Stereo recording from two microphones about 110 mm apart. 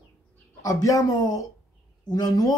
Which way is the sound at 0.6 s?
30° left (ahead or behind).